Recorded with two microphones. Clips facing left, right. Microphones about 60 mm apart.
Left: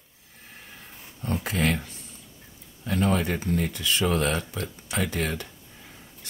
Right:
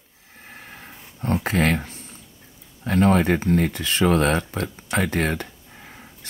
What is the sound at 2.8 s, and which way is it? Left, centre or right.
Speech, right.